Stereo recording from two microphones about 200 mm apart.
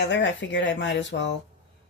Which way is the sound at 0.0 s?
60° left (ahead or behind).